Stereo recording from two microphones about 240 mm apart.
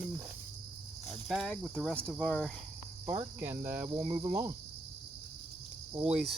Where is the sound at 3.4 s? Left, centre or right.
Centre.